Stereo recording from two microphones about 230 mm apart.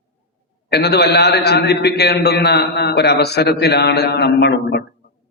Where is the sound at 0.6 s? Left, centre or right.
Left.